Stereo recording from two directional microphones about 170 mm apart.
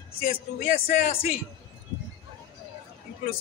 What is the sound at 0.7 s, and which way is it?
Speech, 55° left (ahead or behind).